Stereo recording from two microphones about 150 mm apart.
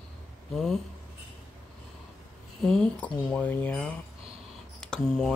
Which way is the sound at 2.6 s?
5° left (ahead or behind).